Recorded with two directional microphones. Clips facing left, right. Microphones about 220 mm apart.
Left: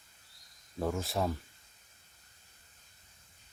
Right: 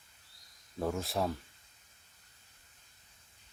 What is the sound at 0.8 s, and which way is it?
Speech, centre (ahead or behind).